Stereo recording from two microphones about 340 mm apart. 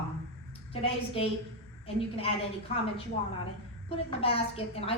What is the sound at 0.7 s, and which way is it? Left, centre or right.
Speech, centre.